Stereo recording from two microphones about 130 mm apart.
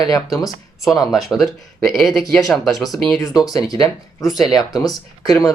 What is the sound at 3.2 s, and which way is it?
Speech, 30° left (ahead or behind).